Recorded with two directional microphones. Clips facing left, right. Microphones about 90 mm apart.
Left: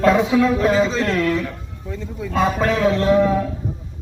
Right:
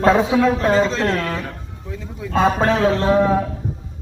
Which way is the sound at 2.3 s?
35° right (ahead or behind).